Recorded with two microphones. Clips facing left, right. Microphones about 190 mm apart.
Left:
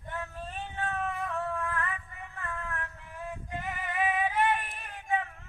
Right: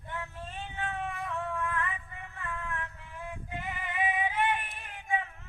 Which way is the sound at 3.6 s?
15° right (ahead or behind).